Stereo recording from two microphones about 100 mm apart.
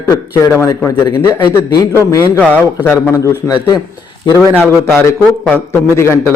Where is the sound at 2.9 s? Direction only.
30° left (ahead or behind).